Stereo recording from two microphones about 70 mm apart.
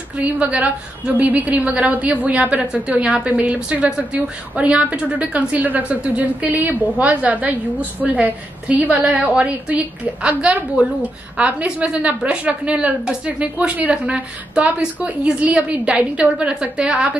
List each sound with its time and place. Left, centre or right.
0.1 s a woman's voice: centre